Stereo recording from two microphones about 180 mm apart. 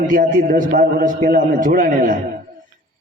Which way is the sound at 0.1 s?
50° right (ahead or behind).